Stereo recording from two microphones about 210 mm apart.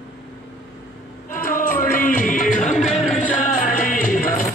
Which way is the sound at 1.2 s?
40° left (ahead or behind).